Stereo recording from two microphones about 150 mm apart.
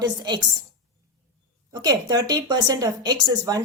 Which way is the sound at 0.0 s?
30° right (ahead or behind).